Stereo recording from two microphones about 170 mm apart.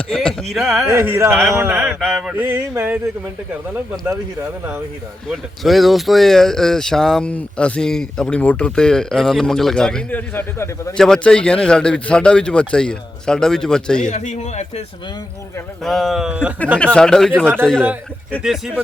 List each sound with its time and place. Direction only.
0.1 s speech: 5° left (ahead or behind)
0.9 s a sound: 15° right (ahead or behind)
1.3 s speech: centre (ahead or behind)
1.5 s a sound: 10° right (ahead or behind)
2.0 s a sound: centre (ahead or behind)
5.3 s speech: centre (ahead or behind)
14.1 s speech: 45° left (ahead or behind)
15.8 s speech: centre (ahead or behind)
16.7 s speech: 5° left (ahead or behind)